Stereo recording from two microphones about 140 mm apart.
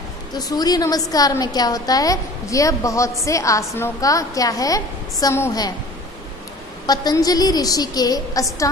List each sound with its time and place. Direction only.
0.3 s a woman's voice: 30° left (ahead or behind)
6.9 s a woman's voice: 25° left (ahead or behind)